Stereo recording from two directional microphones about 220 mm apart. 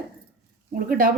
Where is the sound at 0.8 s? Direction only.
40° right (ahead or behind).